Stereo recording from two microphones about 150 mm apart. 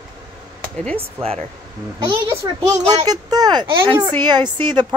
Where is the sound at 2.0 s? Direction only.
30° right (ahead or behind).